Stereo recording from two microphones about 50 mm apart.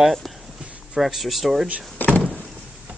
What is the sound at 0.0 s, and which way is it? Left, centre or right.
Speech, centre.